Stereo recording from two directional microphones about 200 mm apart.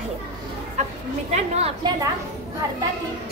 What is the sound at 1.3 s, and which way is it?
Speech, 35° right (ahead or behind).